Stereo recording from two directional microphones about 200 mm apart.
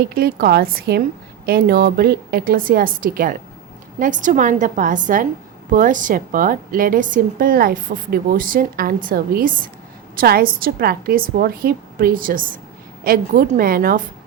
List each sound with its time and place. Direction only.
0.0 s a woman's voice: 50° right (ahead or behind)